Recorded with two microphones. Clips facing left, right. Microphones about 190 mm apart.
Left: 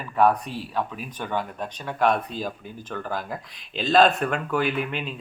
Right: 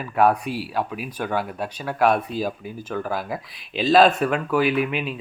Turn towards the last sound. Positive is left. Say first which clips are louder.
# right 5 dB
turn(degrees=-5)  # may be behind; listen again after turning